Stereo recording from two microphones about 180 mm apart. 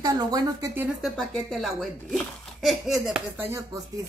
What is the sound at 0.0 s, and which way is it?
Speech, 20° right (ahead or behind).